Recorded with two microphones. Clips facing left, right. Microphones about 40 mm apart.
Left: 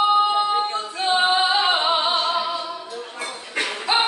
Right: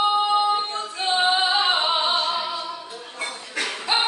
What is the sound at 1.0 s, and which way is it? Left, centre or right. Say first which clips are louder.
Singing: left 2 dB; centre.